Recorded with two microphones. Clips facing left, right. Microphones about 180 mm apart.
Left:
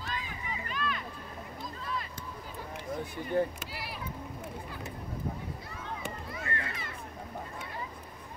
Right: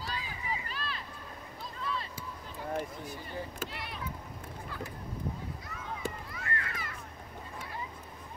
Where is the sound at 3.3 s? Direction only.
60° left (ahead or behind).